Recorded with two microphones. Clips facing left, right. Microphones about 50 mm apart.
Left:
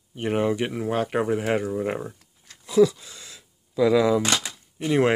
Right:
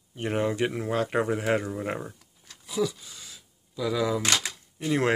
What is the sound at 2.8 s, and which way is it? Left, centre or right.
Speech, left.